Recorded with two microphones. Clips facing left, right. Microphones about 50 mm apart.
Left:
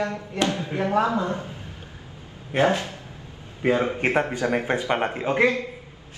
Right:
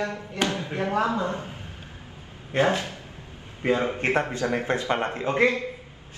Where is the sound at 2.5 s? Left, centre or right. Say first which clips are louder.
Left 2 dB; left.